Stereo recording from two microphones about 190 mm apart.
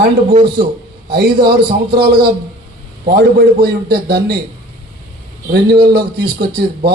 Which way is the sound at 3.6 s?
55° right (ahead or behind).